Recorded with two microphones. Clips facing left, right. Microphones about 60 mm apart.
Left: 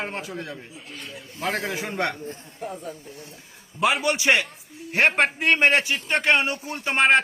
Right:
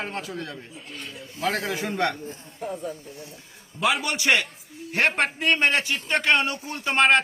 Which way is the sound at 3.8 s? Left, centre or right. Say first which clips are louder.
Left 2 dB; left.